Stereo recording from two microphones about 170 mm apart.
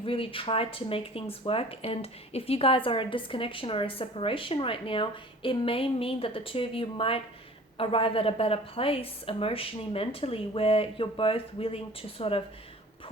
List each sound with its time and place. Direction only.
0.0 s speech: 30° left (ahead or behind)